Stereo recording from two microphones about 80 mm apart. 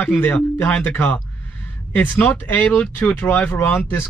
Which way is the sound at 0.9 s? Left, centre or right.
Left.